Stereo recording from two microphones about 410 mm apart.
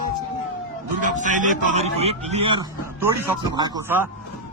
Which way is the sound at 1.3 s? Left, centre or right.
Centre.